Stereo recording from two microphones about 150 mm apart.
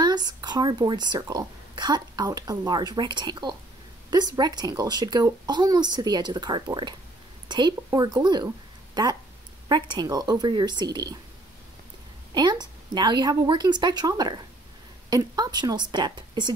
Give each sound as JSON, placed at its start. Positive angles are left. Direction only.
{"t": 0.0, "sound": "speech", "side_deg": -30}
{"t": 9.7, "sound": "speech", "side_deg": -30}
{"t": 12.4, "sound": "speech", "side_deg": -30}